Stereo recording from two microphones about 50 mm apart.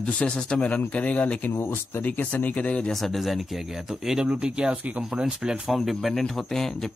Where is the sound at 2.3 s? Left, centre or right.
Left.